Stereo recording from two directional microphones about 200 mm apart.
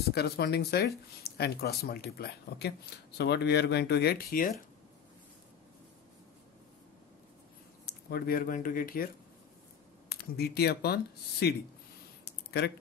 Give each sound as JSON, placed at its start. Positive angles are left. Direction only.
{"t": 0.1, "sound": "speech", "side_deg": 55}
{"t": 7.8, "sound": "speech", "side_deg": 50}
{"t": 12.4, "sound": "a sound", "side_deg": 55}